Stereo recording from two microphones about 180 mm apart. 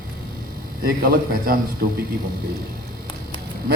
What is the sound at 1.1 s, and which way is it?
Speech, 55° right (ahead or behind).